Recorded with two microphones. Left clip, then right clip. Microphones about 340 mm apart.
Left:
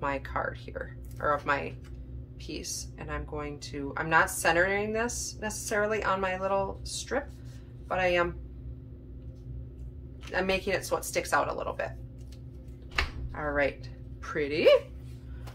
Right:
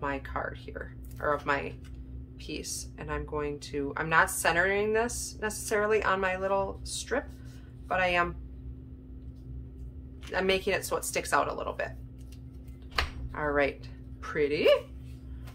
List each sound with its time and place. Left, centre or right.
0.0 s speech: centre
10.3 s speech: centre
14.2 s speech: centre